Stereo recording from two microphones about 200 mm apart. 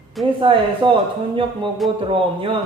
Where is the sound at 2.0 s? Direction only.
25° right (ahead or behind).